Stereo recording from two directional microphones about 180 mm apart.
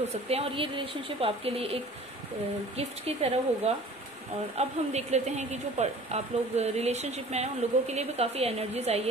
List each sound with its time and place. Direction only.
0.1 s speech: 35° right (ahead or behind)